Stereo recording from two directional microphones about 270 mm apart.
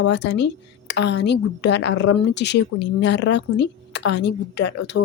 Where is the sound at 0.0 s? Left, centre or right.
Left.